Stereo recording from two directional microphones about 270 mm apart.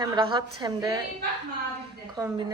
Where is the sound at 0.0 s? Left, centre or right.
Centre.